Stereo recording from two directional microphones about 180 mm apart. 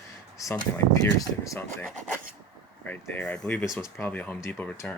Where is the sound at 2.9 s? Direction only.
10° left (ahead or behind).